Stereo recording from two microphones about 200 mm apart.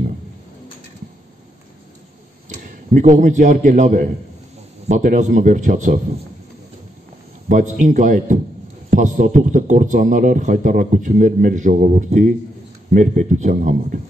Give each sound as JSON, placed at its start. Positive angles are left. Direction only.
{"t": 2.5, "sound": "a man's voice", "side_deg": -40}
{"t": 7.4, "sound": "a man's voice", "side_deg": -40}